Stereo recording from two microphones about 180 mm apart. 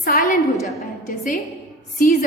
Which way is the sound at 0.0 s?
50° left (ahead or behind).